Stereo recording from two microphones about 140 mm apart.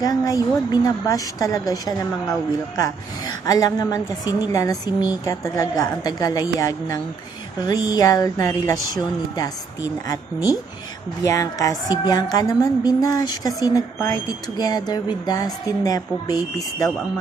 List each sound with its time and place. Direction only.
0.0 s a woman's voice: 25° left (ahead or behind)